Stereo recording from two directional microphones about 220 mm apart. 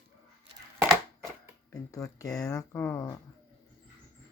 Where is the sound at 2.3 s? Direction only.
15° left (ahead or behind).